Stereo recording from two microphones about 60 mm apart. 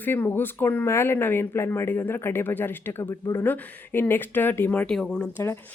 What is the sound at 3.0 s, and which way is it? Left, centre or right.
Speech, left.